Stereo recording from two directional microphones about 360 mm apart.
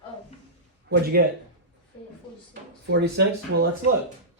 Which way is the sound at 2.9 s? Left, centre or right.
Right.